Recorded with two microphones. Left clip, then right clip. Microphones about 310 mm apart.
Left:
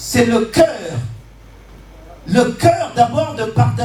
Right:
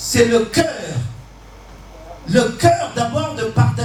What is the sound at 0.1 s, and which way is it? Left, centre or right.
Music, centre.